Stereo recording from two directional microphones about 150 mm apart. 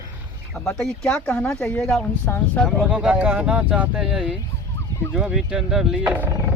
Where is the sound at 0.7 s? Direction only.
5° left (ahead or behind).